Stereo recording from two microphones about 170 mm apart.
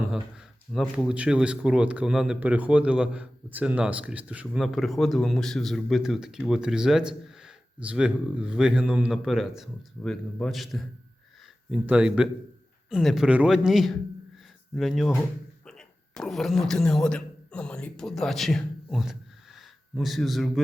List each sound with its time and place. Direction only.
0.1 s a man's voice: centre (ahead or behind)